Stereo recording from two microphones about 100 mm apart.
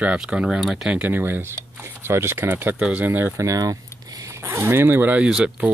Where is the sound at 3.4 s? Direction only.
35° right (ahead or behind).